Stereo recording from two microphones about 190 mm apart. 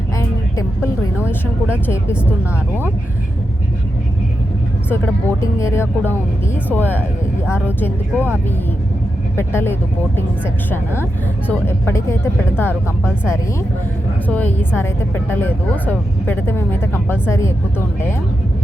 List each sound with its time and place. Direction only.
0.2 s music: 15° left (ahead or behind)
4.9 s speech: 15° left (ahead or behind)
9.3 s speech: 15° left (ahead or behind)
11.4 s speech: 10° left (ahead or behind)